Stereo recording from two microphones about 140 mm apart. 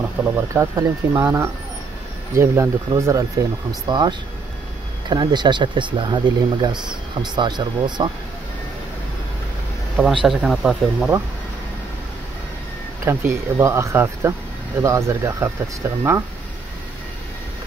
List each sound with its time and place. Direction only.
0.2 s speech: 20° right (ahead or behind)
5.1 s speech: 30° right (ahead or behind)
10.2 s speech: centre (ahead or behind)
13.0 s speech: 20° right (ahead or behind)